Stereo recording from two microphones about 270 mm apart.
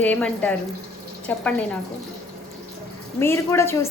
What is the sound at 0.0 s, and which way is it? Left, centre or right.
Speech, centre.